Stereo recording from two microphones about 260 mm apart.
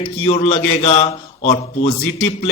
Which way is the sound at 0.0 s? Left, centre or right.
Left.